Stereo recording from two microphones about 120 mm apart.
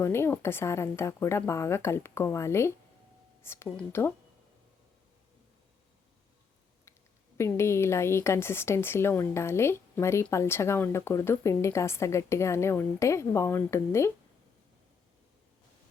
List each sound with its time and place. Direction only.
0.0 s speech: 20° left (ahead or behind)
7.3 s speech: 25° left (ahead or behind)